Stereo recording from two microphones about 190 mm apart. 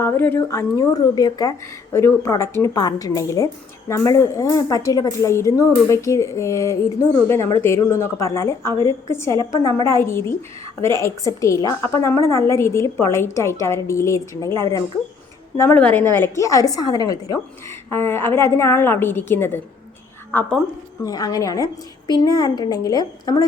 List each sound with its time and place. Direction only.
0.0 s a woman's voice: 10° left (ahead or behind)